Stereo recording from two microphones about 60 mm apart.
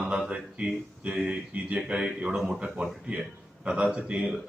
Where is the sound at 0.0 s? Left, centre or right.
Centre.